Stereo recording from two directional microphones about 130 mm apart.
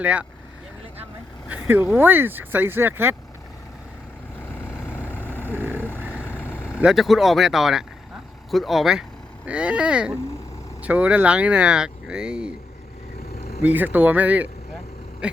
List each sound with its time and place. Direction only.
0.0 s speech: 10° right (ahead or behind)
1.5 s vehicle: 15° right (ahead or behind)
2.0 s speech: 15° right (ahead or behind)
4.5 s vehicle: 15° left (ahead or behind)
5.5 s vehicle: 15° right (ahead or behind)
6.2 s vehicle: 15° left (ahead or behind)
6.7 s speech: 5° right (ahead or behind)
13.7 s speech: 15° right (ahead or behind)
15.2 s a sound: 5° right (ahead or behind)